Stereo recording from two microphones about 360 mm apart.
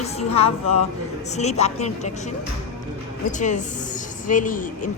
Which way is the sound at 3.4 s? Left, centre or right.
Centre.